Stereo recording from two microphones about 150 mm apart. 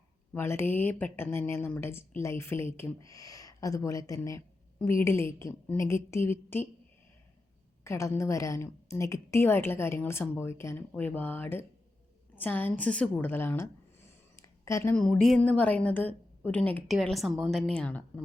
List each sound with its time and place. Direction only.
0.3 s a woman's voice: 15° left (ahead or behind)
7.9 s a woman's voice: 20° left (ahead or behind)
14.3 s a sound: 20° left (ahead or behind)
14.9 s a woman's voice: 5° left (ahead or behind)